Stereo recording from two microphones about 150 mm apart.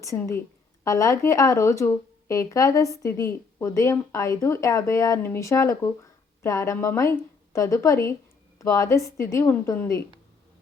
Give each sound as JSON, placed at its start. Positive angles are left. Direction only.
{"t": 0.0, "sound": "speech", "side_deg": 20}